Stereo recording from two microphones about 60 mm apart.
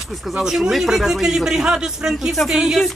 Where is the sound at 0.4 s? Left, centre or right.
Centre.